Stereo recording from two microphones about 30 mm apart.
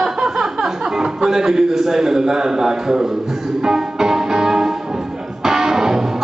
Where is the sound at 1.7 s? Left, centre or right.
Centre.